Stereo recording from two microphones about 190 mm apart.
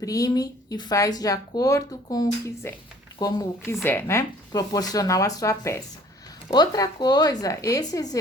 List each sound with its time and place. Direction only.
0.0 s speech: 20° left (ahead or behind)